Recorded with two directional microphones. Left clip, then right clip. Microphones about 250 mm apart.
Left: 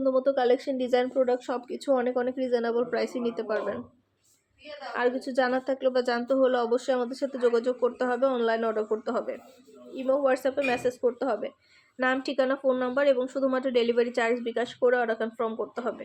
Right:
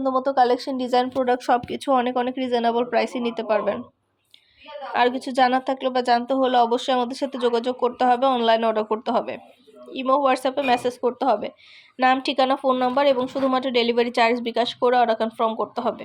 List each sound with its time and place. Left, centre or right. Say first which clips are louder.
0.0 s a woman's voice: right 5 dB; centre
1.2 s speech: right 6 dB; right
1.6 s a woman's voice: right 5 dB; right
4.9 s a woman's voice: right 7 dB; right